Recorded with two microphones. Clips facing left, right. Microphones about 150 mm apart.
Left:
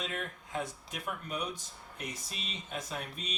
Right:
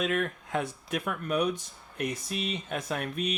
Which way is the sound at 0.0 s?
65° right (ahead or behind).